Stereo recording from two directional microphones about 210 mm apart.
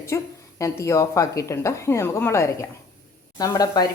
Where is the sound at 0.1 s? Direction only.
15° left (ahead or behind).